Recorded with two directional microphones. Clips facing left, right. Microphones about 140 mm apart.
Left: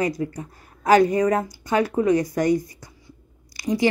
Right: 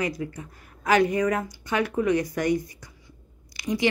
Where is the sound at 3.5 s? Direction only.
35° left (ahead or behind).